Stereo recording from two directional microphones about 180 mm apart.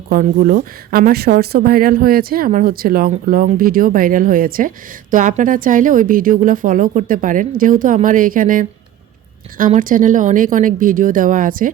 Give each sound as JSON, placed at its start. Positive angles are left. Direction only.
{"t": 0.1, "sound": "a woman's voice", "side_deg": -50}